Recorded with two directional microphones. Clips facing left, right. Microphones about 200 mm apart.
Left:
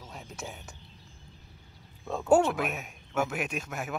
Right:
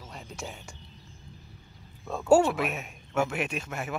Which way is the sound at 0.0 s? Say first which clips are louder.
Right 1 dB; centre (ahead or behind).